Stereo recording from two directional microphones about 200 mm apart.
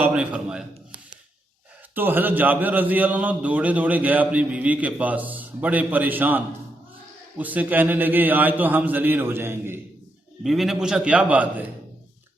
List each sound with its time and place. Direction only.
0.0 s a man's voice: 5° right (ahead or behind)
2.0 s a man's voice: 10° right (ahead or behind)
10.4 s a man's voice: centre (ahead or behind)